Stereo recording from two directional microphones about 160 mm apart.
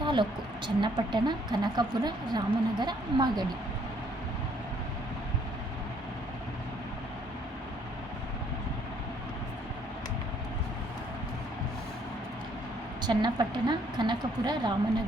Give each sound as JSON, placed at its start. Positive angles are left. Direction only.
{"t": 0.0, "sound": "a woman's voice", "side_deg": -30}
{"t": 13.0, "sound": "a woman's voice", "side_deg": -25}